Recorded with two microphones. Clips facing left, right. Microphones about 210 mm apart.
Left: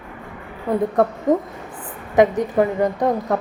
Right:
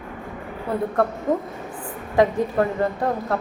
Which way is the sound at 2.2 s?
15° left (ahead or behind).